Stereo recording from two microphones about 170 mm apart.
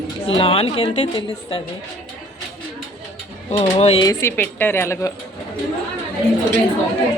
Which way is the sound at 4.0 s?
20° left (ahead or behind).